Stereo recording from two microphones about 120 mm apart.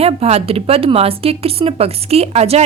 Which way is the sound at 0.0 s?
60° right (ahead or behind).